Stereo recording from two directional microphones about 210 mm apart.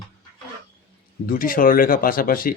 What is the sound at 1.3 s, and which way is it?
Speech, 40° left (ahead or behind).